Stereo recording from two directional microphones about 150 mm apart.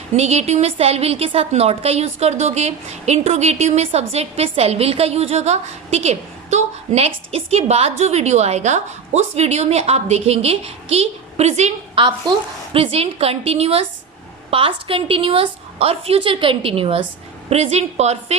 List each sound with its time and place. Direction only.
0.2 s a woman's voice: 45° right (ahead or behind)
12.0 s a woman's voice: 35° right (ahead or behind)